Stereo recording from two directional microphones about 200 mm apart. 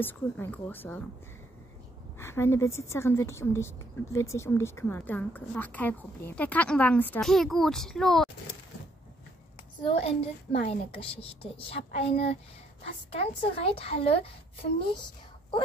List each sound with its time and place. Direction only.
0.0 s a woman's voice: 10° left (ahead or behind)
2.1 s a woman's voice: 15° left (ahead or behind)
9.8 s a child's voice: 30° left (ahead or behind)